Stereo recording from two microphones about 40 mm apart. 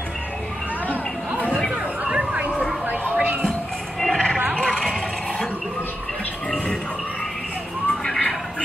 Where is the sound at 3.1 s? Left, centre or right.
Right.